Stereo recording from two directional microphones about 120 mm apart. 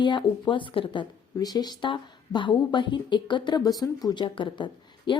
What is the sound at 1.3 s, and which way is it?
Speech, 35° left (ahead or behind).